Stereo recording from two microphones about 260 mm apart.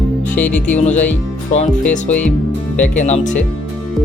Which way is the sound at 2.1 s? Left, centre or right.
Centre.